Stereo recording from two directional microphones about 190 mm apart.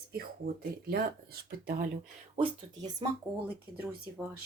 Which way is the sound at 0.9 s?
55° right (ahead or behind).